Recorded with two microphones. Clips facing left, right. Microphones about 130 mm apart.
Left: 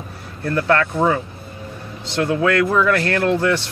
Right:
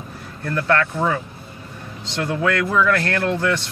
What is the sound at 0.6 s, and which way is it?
Speech, 25° left (ahead or behind).